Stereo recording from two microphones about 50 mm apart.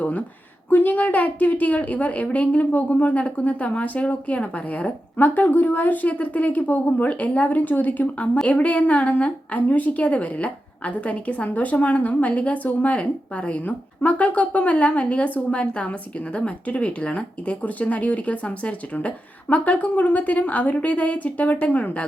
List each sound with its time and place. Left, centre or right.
0.0 s a woman's voice: left